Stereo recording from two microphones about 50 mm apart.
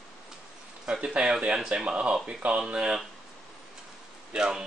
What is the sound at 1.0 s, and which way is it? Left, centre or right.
Speech, right.